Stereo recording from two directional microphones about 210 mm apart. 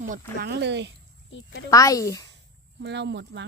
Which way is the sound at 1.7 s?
15° left (ahead or behind).